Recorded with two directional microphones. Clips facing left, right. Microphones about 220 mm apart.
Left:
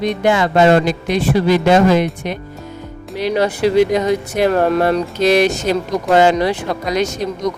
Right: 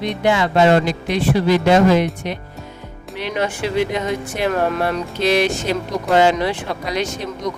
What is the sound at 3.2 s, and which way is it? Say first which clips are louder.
Speech: left 6 dB; 35° left (ahead or behind).